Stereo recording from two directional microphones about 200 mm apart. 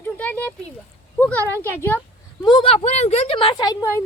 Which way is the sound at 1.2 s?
10° left (ahead or behind).